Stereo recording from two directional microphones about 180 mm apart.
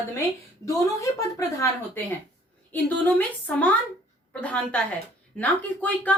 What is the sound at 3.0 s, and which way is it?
Speech, 10° left (ahead or behind).